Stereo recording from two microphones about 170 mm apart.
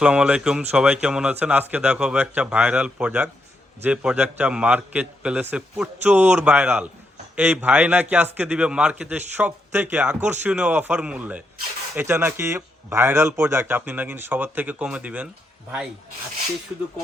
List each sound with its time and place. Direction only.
0.0 s speech: 5° right (ahead or behind)